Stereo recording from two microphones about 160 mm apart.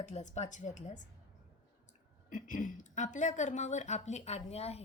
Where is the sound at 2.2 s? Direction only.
55° left (ahead or behind).